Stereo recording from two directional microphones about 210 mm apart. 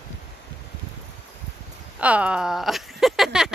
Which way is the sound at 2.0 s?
5° right (ahead or behind).